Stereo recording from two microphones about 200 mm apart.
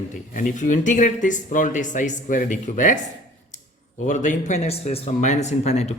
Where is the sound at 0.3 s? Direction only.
40° left (ahead or behind).